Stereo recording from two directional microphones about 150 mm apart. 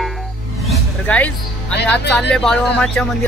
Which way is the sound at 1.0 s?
10° left (ahead or behind).